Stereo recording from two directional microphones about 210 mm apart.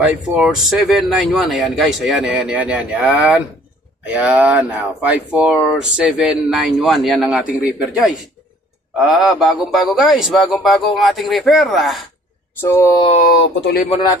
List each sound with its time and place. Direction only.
0.3 s speech: centre (ahead or behind)
12.6 s a sound: 10° left (ahead or behind)
13.1 s speech: 40° left (ahead or behind)